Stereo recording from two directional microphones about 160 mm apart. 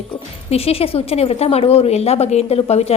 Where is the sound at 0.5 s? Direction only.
40° left (ahead or behind).